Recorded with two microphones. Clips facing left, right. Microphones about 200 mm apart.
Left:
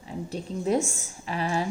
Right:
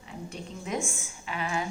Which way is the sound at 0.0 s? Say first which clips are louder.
Left 6 dB; 35° left (ahead or behind).